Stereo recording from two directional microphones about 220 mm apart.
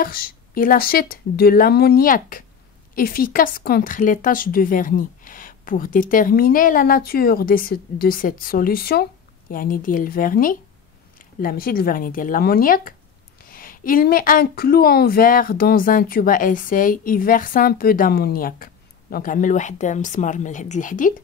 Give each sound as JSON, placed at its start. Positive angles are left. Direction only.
{"t": 0.0, "sound": "a woman's voice", "side_deg": 40}